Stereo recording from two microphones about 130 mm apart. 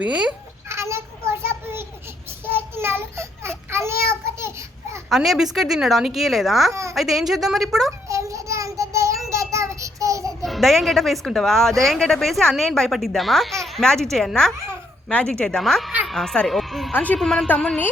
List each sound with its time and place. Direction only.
0.0 s a child's voice: 10° right (ahead or behind)
0.7 s a sound: 20° right (ahead or behind)
2.5 s child singing: 15° right (ahead or behind)
5.0 s speech: centre (ahead or behind)
8.0 s child singing: 25° right (ahead or behind)
10.4 s speech: centre (ahead or behind)
16.9 s speech: 10° left (ahead or behind)